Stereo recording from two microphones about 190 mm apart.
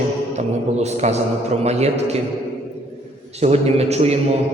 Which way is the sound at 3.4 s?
35° right (ahead or behind).